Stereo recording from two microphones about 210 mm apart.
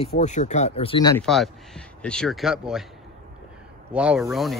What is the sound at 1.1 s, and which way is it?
A man's voice, centre (ahead or behind).